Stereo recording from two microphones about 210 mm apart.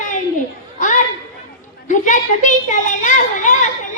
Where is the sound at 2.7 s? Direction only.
35° left (ahead or behind).